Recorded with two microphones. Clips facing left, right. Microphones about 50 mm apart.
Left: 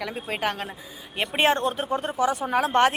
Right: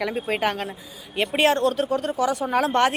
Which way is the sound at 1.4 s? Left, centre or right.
Left.